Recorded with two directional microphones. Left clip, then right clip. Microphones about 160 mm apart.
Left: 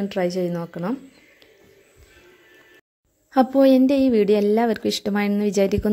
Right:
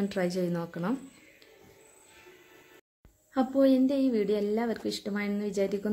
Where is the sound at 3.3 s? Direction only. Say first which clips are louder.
Left 9 dB; 55° left (ahead or behind).